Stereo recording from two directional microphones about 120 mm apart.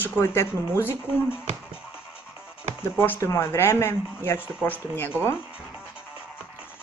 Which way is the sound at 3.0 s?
20° left (ahead or behind).